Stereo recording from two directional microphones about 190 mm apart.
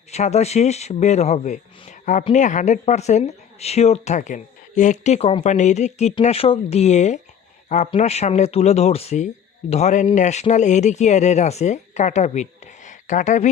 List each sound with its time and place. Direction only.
0.1 s a man's voice: 35° left (ahead or behind)